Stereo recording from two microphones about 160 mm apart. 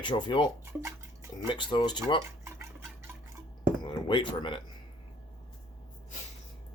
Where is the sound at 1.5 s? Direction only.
30° left (ahead or behind).